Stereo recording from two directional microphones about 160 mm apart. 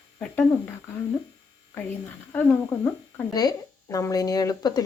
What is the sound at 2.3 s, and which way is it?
Speech, 10° left (ahead or behind).